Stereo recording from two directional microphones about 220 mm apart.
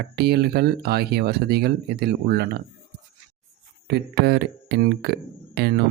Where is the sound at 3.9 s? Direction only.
45° right (ahead or behind).